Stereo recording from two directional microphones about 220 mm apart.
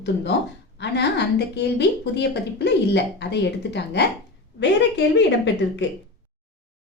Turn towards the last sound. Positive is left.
turn(degrees=55)  # may be behind; listen again after turning